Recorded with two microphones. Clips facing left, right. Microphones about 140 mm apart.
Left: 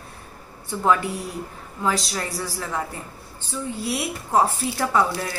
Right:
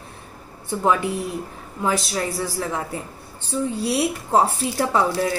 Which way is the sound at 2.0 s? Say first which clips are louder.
Right 4 dB; 20° right (ahead or behind).